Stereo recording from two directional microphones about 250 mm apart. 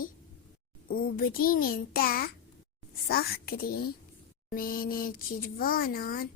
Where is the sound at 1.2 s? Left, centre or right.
Left.